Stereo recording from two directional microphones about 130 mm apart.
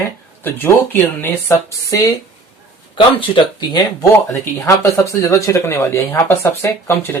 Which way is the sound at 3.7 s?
25° left (ahead or behind).